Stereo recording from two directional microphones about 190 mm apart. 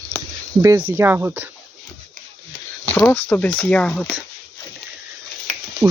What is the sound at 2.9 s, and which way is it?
Speech, 10° left (ahead or behind).